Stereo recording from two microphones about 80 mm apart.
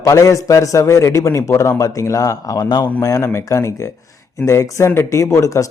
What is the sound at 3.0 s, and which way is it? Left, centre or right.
A man's voice, left.